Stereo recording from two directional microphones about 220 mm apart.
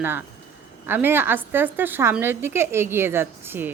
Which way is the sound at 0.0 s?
10° right (ahead or behind).